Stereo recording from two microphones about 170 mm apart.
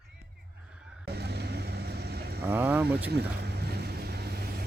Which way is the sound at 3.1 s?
70° right (ahead or behind).